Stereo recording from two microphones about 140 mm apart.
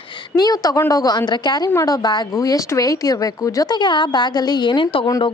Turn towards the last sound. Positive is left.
turn(degrees=40)  # may be behind; listen again after turning